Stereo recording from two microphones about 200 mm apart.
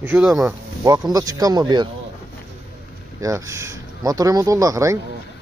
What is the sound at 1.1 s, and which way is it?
Speech, 20° right (ahead or behind).